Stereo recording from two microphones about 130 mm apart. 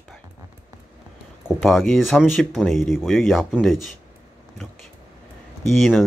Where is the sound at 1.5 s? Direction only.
Centre (ahead or behind).